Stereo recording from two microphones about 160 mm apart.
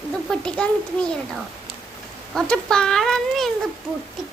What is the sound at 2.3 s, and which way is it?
Speech, 5° left (ahead or behind).